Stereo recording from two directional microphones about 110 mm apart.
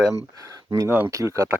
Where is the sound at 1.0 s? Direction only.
30° right (ahead or behind).